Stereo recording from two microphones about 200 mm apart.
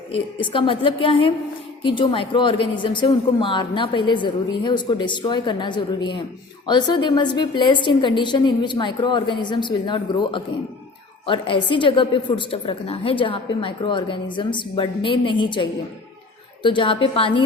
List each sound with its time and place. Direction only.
0.3 s a woman's voice: 25° left (ahead or behind)